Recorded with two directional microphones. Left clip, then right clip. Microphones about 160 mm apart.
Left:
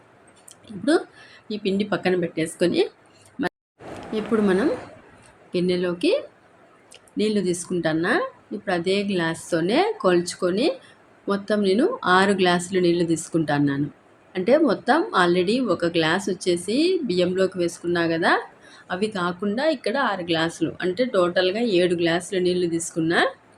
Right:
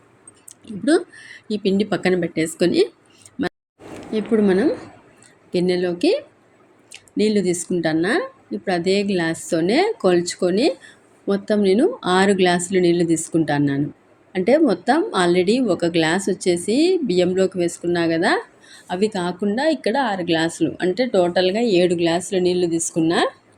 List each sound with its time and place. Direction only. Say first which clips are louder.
0.6 s speech: right 3 dB; 20° right (ahead or behind)
4.0 s a woman's voice: right 4 dB; 15° right (ahead or behind)